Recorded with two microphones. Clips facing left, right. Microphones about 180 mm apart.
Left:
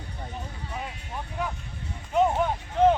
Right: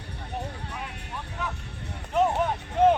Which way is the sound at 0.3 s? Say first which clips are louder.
Right 3 dB; 65° right (ahead or behind).